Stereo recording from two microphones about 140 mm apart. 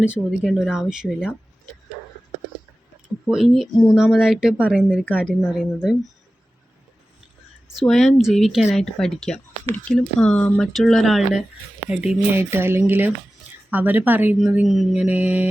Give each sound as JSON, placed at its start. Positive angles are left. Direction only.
{"t": 0.0, "sound": "speech", "side_deg": -5}
{"t": 3.2, "sound": "speech", "side_deg": -5}
{"t": 7.8, "sound": "speech", "side_deg": 0}